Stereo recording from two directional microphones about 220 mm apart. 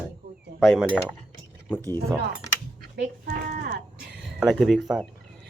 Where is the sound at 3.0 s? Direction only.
45° right (ahead or behind).